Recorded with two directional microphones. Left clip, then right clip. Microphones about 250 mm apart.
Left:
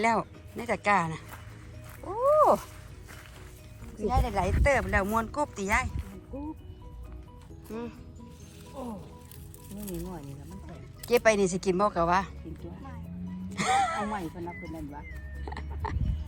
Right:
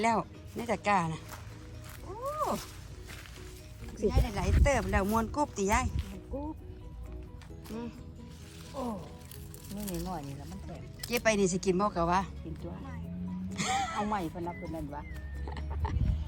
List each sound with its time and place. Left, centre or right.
0.0 s speech: centre
2.0 s cat: centre
3.9 s speech: centre
7.7 s speech: centre
13.5 s speech: centre
15.4 s music: centre